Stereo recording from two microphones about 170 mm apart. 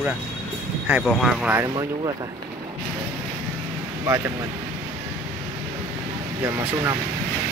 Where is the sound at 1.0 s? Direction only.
5° right (ahead or behind).